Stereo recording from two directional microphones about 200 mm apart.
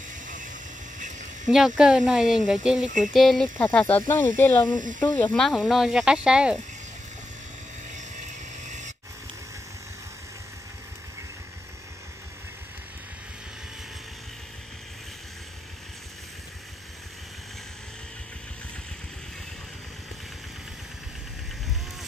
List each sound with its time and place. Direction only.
0.9 s a sound: 40° right (ahead or behind)
1.8 s speech: 5° right (ahead or behind)
4.7 s speech: 40° right (ahead or behind)
5.0 s speech: 10° left (ahead or behind)
8.2 s vehicle: 35° right (ahead or behind)